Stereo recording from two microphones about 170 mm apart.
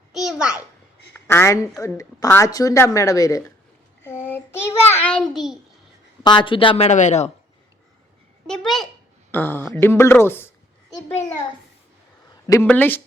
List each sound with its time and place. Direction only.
0.1 s a child's voice: 5° right (ahead or behind)
1.1 s a woman's voice: 15° left (ahead or behind)
4.0 s child singing: 10° left (ahead or behind)
6.2 s speech: 30° left (ahead or behind); by 7.3 s 45° left (ahead or behind)
8.4 s a woman's voice: centre (ahead or behind)
12.6 s a woman's voice: 10° left (ahead or behind)